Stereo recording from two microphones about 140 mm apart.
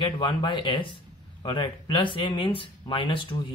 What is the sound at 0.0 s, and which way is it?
Speech, 35° left (ahead or behind).